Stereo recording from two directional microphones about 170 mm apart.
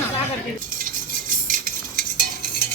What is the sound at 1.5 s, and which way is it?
Cutlery, 55° right (ahead or behind).